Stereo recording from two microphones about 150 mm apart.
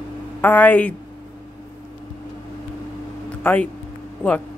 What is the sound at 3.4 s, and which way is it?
Speech, 10° left (ahead or behind).